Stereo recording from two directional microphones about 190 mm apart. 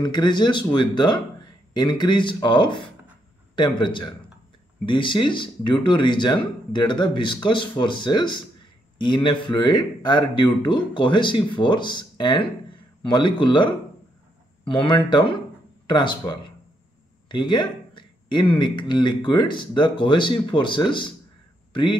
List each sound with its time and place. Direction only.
0.0 s speech: 25° left (ahead or behind)